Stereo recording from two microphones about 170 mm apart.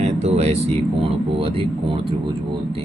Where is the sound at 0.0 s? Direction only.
40° right (ahead or behind).